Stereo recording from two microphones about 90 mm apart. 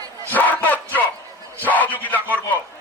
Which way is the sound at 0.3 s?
20° left (ahead or behind).